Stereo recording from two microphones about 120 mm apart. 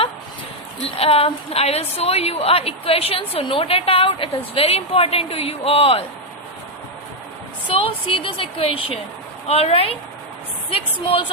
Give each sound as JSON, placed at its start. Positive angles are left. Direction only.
{"t": 0.9, "sound": "a woman's voice", "side_deg": 55}
{"t": 8.0, "sound": "a woman's voice", "side_deg": 50}